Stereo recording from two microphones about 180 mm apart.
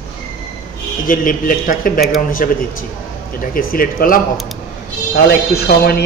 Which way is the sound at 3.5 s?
50° left (ahead or behind).